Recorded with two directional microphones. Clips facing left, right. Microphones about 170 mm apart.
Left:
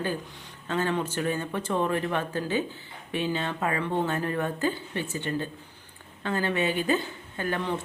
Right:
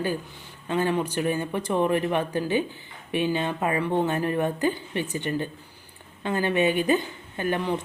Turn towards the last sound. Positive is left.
turn(degrees=-15)  # may be behind; listen again after turning